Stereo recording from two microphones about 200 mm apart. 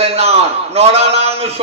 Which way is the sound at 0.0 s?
30° right (ahead or behind).